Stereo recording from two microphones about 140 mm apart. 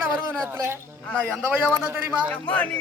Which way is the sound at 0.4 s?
20° right (ahead or behind).